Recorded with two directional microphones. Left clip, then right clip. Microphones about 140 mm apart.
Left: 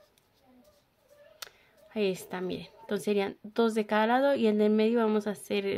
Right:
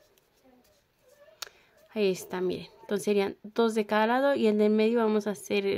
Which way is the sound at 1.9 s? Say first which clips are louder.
Right 3 dB; 25° right (ahead or behind).